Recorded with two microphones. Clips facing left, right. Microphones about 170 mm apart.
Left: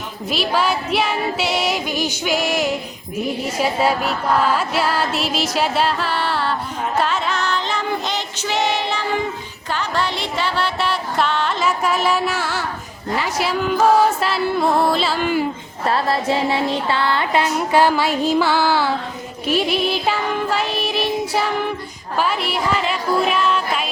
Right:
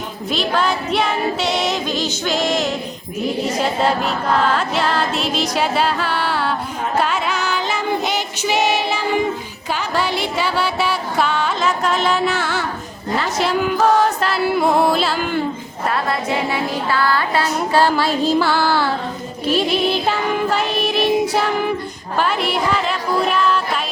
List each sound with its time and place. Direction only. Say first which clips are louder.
0.3 s music: even; 5° left (ahead or behind)
15.9 s music: left 2 dB; 30° left (ahead or behind); by 21.7 s 5° left (ahead or behind)
22.2 s speech: right 2 dB; 5° left (ahead or behind)